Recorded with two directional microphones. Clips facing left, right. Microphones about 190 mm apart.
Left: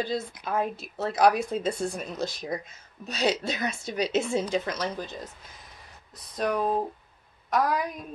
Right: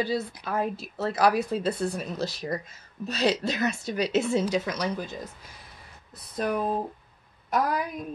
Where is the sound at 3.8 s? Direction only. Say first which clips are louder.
Left 1 dB; 5° right (ahead or behind).